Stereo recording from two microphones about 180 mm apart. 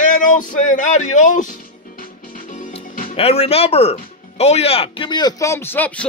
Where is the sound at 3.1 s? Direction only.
35° left (ahead or behind).